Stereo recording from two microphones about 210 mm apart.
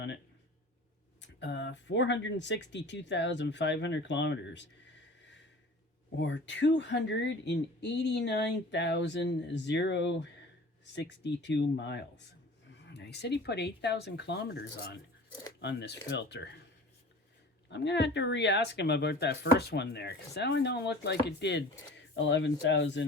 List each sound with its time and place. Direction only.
1.2 s speech: 55° left (ahead or behind)
6.1 s speech: 60° left (ahead or behind)
17.7 s speech: 55° left (ahead or behind)